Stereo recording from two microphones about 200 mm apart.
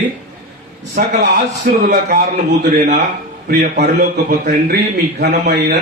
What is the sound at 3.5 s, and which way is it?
Speech, 60° right (ahead or behind).